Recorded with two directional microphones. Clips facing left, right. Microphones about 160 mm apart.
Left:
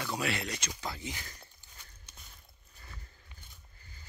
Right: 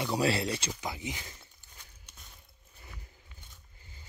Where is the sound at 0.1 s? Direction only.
30° right (ahead or behind).